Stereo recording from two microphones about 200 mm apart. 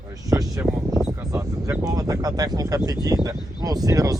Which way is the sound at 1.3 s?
15° right (ahead or behind).